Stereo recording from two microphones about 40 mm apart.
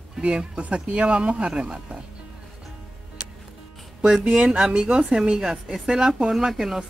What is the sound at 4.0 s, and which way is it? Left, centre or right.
Speech, centre.